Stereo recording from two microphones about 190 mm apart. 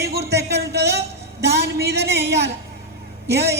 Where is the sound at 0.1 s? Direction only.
60° right (ahead or behind).